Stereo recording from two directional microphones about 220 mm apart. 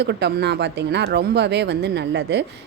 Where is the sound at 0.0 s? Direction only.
50° right (ahead or behind).